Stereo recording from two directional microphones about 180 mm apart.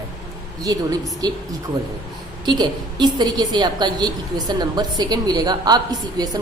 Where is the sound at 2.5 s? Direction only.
20° right (ahead or behind).